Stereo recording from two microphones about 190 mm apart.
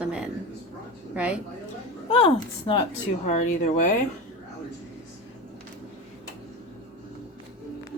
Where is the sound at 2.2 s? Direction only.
25° left (ahead or behind).